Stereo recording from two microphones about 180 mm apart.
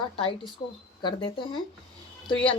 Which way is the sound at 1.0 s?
30° left (ahead or behind).